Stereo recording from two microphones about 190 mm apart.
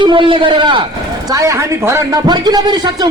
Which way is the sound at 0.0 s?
25° right (ahead or behind).